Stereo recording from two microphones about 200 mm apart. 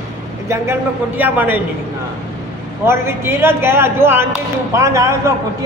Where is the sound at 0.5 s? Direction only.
15° right (ahead or behind).